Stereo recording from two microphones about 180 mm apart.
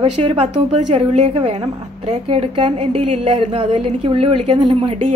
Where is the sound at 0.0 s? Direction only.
35° right (ahead or behind).